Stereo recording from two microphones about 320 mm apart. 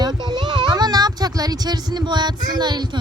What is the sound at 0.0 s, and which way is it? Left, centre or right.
Speech, centre.